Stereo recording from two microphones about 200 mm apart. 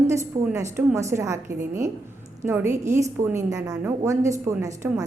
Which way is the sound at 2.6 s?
40° right (ahead or behind).